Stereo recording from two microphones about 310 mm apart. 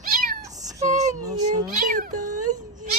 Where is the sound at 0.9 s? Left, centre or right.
Right.